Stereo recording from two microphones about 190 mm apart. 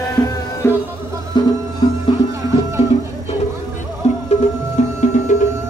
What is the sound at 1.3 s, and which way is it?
Music, 25° left (ahead or behind).